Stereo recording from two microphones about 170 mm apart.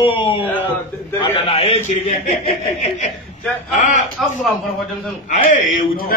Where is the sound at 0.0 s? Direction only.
30° left (ahead or behind).